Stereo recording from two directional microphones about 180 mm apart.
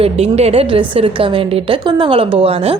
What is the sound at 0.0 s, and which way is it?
A woman's voice, 35° right (ahead or behind).